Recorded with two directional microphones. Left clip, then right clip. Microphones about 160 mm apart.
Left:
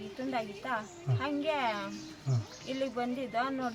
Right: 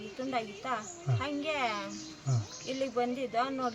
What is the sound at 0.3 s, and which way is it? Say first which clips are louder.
Speech: even; 5° right (ahead or behind).